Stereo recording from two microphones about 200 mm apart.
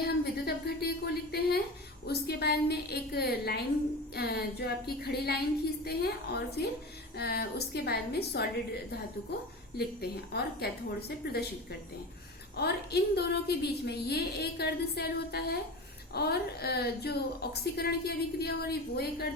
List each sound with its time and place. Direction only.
0.0 s a sound: 50° left (ahead or behind)
2.0 s a woman's voice: 55° left (ahead or behind)
12.5 s a woman's voice: 55° left (ahead or behind)